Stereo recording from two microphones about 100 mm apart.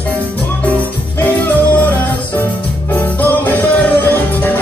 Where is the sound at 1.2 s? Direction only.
15° left (ahead or behind).